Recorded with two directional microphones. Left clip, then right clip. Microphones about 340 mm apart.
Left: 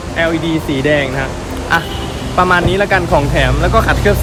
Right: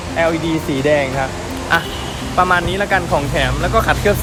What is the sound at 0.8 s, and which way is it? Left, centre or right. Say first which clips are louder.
Speech: even; centre.